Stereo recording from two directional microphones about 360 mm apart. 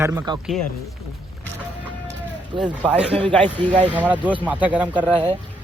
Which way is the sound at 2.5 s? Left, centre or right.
Centre.